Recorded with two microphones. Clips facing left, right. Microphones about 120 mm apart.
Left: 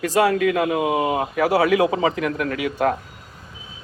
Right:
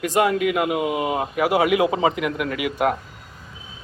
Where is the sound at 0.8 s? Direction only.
40° left (ahead or behind).